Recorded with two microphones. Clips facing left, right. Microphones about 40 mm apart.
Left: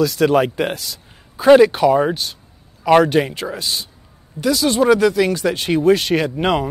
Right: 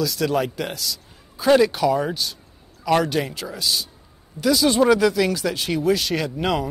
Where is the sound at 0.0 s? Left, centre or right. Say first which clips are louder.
Left 7 dB; left.